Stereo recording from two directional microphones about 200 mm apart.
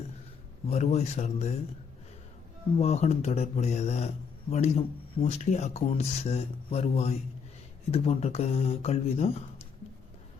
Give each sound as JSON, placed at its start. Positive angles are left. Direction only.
{"t": 0.7, "sound": "speech", "side_deg": 35}
{"t": 2.7, "sound": "speech", "side_deg": 30}